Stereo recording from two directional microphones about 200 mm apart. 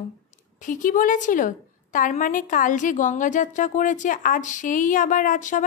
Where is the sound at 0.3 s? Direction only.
40° left (ahead or behind).